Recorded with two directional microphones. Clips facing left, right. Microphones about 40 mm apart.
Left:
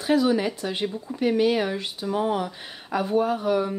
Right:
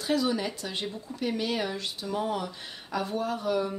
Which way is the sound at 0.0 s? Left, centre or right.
Left.